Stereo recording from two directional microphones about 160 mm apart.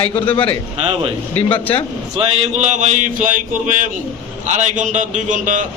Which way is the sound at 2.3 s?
45° right (ahead or behind).